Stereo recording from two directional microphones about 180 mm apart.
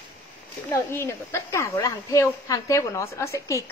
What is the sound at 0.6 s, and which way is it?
Speech, 15° left (ahead or behind).